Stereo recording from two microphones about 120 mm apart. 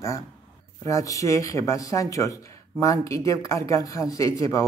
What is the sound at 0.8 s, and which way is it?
Speech, 25° left (ahead or behind).